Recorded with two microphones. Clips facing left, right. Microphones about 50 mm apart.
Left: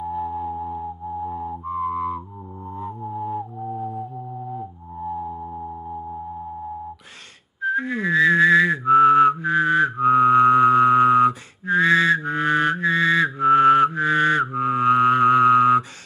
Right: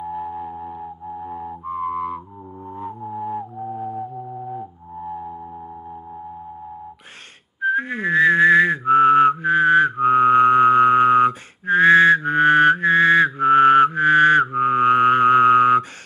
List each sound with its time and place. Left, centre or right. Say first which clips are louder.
0.0 s music: left 2 dB; right
3.1 s music: right 1 dB; right
4.3 s music: right 1 dB; right
5.3 s a sound: left 2 dB; centre
7.6 s whistling: right 2 dB; right